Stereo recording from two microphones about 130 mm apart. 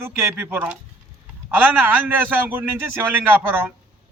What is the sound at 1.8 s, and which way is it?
Speech, 15° right (ahead or behind).